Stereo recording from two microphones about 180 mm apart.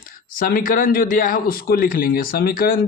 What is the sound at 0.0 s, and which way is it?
Speech, 50° left (ahead or behind).